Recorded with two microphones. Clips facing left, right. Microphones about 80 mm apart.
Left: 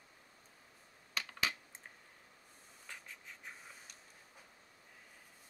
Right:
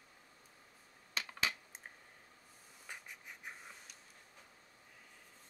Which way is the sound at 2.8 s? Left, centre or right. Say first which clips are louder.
Right 1 dB; centre.